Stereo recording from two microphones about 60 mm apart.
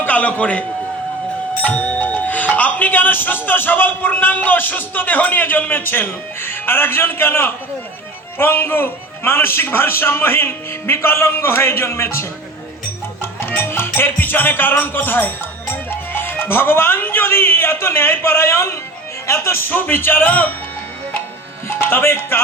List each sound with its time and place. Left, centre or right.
0.0 s a man's voice: left
1.6 s speech: left
13.4 s music: left
19.3 s speech: left
21.7 s speech: left